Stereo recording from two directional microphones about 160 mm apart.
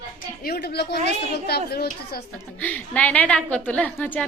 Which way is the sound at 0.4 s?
85° left.